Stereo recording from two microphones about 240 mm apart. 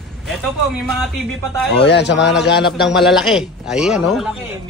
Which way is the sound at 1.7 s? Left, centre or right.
Left.